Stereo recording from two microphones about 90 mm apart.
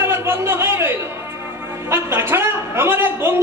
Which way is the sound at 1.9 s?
25° right (ahead or behind).